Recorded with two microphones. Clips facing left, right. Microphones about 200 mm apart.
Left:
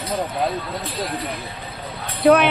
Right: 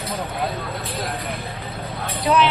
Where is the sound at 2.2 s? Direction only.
55° left (ahead or behind).